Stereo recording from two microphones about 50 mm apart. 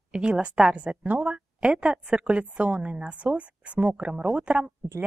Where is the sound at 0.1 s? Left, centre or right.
Centre.